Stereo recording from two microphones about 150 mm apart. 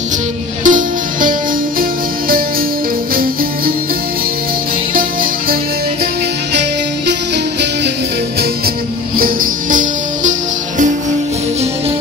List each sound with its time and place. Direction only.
0.7 s music: 60° right (ahead or behind)
1.8 s music: 75° right (ahead or behind)
4.9 s music: 70° right (ahead or behind)
9.1 s music: 70° right (ahead or behind)